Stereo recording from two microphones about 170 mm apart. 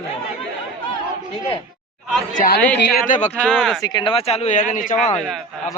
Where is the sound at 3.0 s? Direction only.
45° left (ahead or behind).